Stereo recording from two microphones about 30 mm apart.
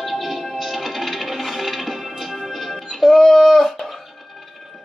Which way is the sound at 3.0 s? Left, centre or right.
Centre.